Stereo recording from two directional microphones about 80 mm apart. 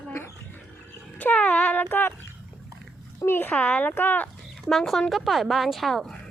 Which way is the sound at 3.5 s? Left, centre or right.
Centre.